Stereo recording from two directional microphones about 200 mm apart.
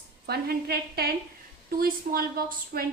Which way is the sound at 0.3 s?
50° right (ahead or behind).